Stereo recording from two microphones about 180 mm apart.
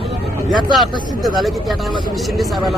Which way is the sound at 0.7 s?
Centre (ahead or behind).